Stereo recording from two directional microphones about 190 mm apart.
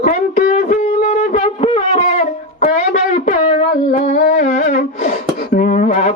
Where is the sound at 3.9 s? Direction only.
40° left (ahead or behind).